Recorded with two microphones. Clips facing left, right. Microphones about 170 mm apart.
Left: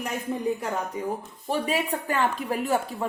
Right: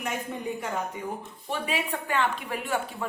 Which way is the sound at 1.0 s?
35° left (ahead or behind).